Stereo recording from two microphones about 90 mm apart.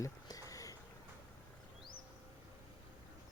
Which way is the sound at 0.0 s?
40° left (ahead or behind).